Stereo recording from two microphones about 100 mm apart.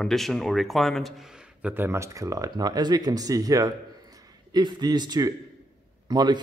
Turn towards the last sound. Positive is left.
turn(degrees=-45)  # may be behind; listen again after turning